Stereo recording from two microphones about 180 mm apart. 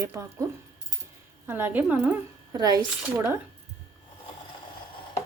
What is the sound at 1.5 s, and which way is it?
Speech, 10° right (ahead or behind).